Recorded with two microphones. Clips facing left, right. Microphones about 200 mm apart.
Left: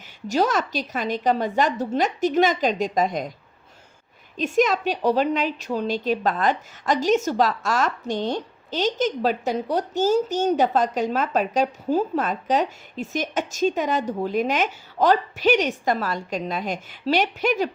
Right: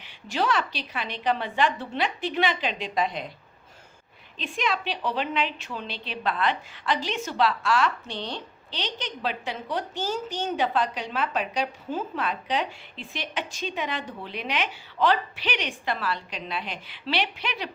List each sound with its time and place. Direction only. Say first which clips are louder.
0.3 s a woman's voice: left 5 dB; 40° left (ahead or behind)
4.4 s a woman's voice: left 9 dB; 45° left (ahead or behind)